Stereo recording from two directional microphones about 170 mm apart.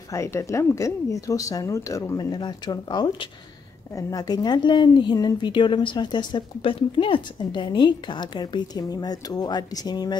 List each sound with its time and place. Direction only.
0.1 s a woman's voice: 15° left (ahead or behind)